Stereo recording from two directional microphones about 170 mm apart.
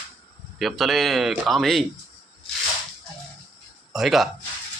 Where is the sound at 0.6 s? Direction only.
Centre (ahead or behind).